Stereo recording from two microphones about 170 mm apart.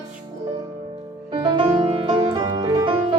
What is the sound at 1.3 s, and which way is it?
Music, 30° right (ahead or behind).